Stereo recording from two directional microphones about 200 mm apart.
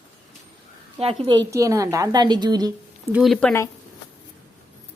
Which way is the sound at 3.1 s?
Centre (ahead or behind).